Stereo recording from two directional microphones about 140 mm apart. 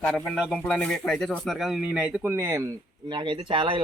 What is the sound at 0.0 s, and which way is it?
Speech, 10° left (ahead or behind).